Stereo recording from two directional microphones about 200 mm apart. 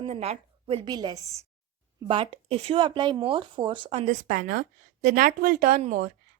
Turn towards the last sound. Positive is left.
turn(degrees=-40)  # may be behind; listen again after turning